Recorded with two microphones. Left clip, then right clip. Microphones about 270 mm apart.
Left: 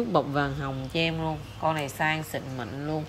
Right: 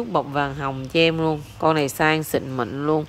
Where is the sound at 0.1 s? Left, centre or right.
Centre.